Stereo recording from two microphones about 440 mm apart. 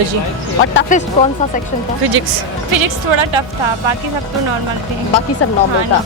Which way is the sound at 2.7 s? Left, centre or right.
Right.